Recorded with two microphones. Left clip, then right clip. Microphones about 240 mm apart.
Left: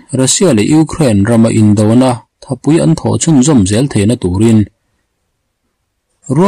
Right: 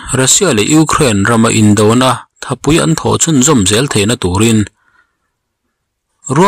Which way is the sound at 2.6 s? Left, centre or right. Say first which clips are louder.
Even; centre.